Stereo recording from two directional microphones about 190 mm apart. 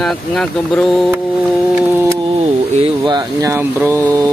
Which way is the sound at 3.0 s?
20° right (ahead or behind).